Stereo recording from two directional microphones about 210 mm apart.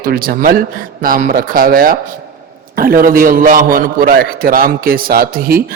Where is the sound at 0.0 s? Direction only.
45° right (ahead or behind).